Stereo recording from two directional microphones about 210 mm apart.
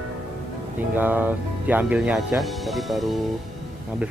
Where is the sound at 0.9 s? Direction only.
10° right (ahead or behind).